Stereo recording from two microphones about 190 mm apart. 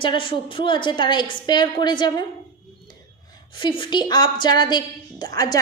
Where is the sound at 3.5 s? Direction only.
25° left (ahead or behind).